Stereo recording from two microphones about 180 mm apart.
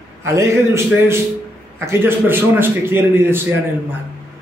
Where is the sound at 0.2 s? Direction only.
15° right (ahead or behind).